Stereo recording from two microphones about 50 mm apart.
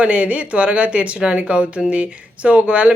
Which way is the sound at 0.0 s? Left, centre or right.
Right.